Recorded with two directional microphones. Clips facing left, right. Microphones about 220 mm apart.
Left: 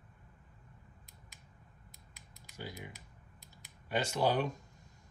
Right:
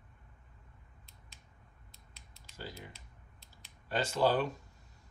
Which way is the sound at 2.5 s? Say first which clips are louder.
Left 1 dB; 15° left (ahead or behind).